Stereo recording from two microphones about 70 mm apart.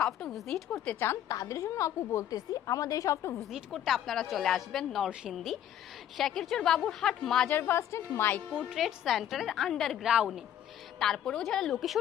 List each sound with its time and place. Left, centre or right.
0.0 s a woman's voice: centre
0.9 s a woman's voice: left
1.3 s a woman's voice: left
3.7 s a woman's voice: centre
7.5 s a woman's voice: left
7.8 s a woman's voice: left
8.4 s a woman's voice: centre
10.0 s a woman's voice: centre
11.0 s a woman's voice: centre